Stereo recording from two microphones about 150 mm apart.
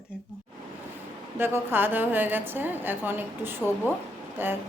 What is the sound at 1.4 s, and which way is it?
A woman's voice, 15° right (ahead or behind).